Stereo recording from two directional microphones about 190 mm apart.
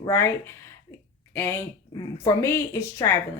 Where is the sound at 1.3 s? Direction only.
10° left (ahead or behind).